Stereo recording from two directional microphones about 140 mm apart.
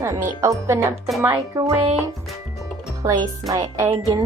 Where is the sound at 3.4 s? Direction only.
25° right (ahead or behind).